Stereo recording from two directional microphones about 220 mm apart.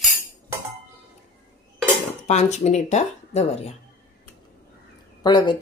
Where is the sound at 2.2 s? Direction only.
30° left (ahead or behind).